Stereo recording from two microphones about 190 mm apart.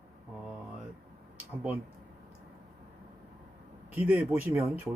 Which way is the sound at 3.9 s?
10° right (ahead or behind).